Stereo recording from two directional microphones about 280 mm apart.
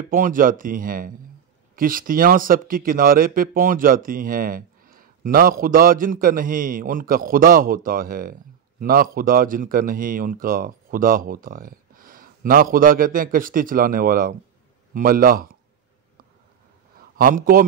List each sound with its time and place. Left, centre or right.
0.1 s speech: right
17.2 s speech: right